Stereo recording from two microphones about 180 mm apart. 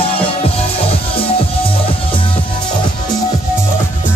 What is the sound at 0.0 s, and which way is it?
Music, 30° left (ahead or behind).